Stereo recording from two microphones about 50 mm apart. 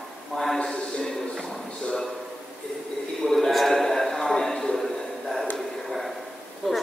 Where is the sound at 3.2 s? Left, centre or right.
Centre.